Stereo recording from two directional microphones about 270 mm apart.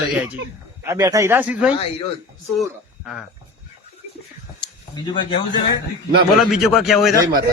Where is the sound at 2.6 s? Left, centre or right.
Centre.